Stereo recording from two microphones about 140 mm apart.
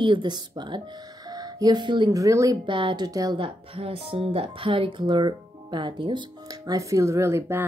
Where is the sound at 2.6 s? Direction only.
35° right (ahead or behind).